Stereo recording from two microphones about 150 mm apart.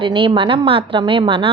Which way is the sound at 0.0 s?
35° right (ahead or behind).